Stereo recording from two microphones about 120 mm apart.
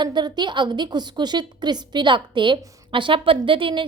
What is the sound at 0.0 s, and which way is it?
A woman's voice, 40° right (ahead or behind).